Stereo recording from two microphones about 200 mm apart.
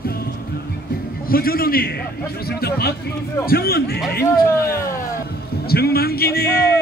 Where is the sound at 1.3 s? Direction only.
45° left (ahead or behind).